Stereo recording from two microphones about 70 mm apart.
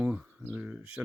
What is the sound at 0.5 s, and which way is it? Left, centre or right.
Speech, centre.